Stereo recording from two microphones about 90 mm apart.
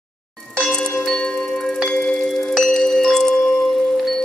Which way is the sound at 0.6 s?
5° left (ahead or behind).